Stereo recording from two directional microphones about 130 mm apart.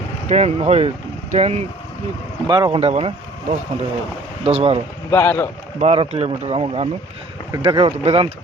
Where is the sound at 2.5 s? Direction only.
35° right (ahead or behind).